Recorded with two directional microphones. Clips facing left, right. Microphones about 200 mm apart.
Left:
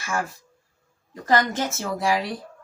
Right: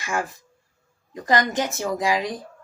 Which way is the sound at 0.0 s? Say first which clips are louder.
Right 1 dB; 15° right (ahead or behind).